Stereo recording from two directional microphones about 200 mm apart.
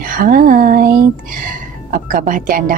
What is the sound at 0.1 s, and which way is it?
Speech, 45° right (ahead or behind).